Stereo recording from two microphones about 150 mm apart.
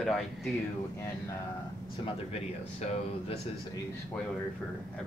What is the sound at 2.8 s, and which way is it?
Speech, 45° left (ahead or behind).